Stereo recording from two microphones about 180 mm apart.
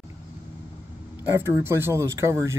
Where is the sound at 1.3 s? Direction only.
15° right (ahead or behind).